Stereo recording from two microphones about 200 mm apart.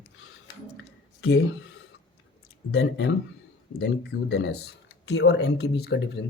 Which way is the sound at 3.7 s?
55° left (ahead or behind).